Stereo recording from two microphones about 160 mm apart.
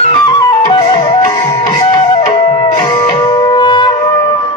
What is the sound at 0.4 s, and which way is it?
Music, 30° left (ahead or behind).